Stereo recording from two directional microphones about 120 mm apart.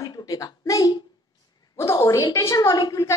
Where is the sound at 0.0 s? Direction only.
30° left (ahead or behind).